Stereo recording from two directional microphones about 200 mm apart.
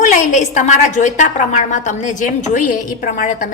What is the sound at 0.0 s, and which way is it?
A woman's voice, 40° left (ahead or behind).